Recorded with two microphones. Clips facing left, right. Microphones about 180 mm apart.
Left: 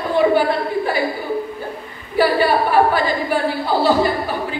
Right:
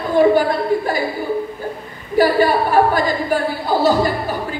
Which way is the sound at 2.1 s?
45° right (ahead or behind).